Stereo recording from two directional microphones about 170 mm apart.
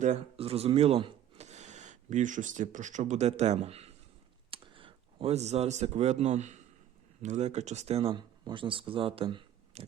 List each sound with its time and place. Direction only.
0.0 s speech: 35° right (ahead or behind)